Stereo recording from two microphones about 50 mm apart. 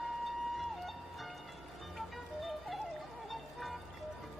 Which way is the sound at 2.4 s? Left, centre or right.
Centre.